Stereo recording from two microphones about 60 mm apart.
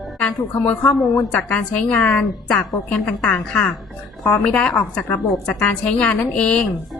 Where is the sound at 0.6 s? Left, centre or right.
Left.